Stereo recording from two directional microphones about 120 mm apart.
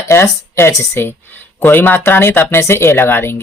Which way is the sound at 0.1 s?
20° left (ahead or behind).